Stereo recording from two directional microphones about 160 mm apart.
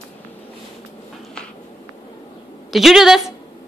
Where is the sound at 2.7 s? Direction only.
Centre (ahead or behind).